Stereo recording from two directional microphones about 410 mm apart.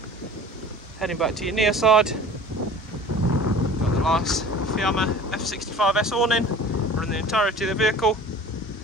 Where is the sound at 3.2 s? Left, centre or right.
Left.